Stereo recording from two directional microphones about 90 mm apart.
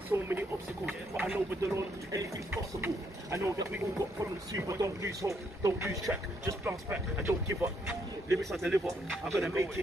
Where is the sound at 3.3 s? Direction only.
35° right (ahead or behind).